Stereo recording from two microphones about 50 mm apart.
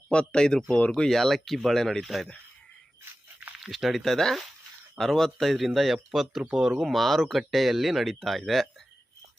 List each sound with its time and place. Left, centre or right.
0.1 s speech: centre
1.1 s speech: centre
3.6 s speech: centre
6.9 s speech: centre